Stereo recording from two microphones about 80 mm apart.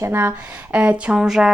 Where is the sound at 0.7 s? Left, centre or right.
Centre.